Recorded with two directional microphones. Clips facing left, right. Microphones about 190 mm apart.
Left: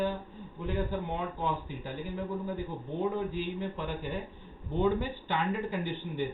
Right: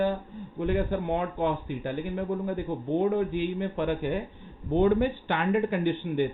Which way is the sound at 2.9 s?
65° right (ahead or behind).